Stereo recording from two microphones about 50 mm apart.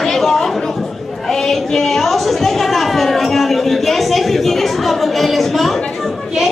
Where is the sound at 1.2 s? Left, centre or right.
Centre.